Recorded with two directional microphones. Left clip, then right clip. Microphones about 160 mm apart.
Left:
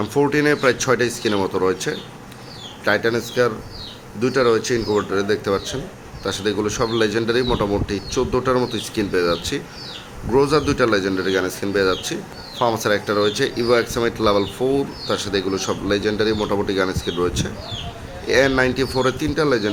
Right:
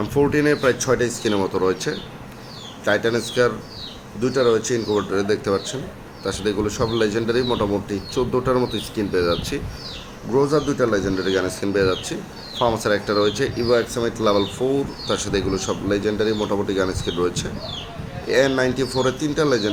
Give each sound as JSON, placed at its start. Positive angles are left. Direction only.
{"t": 0.0, "sound": "speech", "side_deg": 10}
{"t": 10.3, "sound": "a man's voice", "side_deg": 30}
{"t": 11.0, "sound": "speech", "side_deg": 5}